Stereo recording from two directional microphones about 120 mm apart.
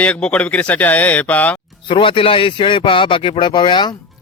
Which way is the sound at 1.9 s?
45° left (ahead or behind).